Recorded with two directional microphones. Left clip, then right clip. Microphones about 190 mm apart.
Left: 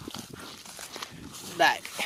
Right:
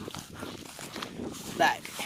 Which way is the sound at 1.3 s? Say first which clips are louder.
Left 2 dB; centre (ahead or behind).